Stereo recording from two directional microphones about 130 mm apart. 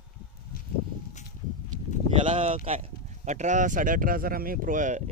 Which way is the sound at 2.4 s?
55° right (ahead or behind).